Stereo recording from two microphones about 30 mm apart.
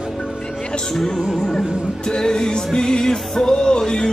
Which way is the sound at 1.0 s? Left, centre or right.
Centre.